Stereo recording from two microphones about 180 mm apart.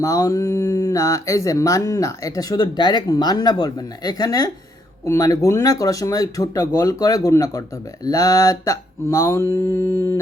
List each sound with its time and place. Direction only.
0.0 s speech: 20° left (ahead or behind)
7.3 s mantra: 15° left (ahead or behind)